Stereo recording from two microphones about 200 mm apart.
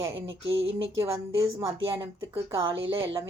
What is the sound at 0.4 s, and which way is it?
Speech, 70° right (ahead or behind).